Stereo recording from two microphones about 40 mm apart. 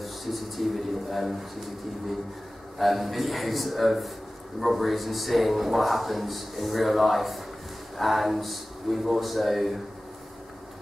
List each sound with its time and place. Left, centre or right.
0.0 s a man's voice: centre